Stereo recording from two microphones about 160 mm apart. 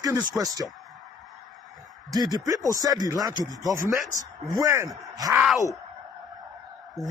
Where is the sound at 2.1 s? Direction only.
25° right (ahead or behind).